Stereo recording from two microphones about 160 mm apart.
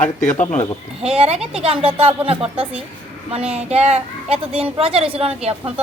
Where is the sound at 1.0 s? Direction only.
35° right (ahead or behind).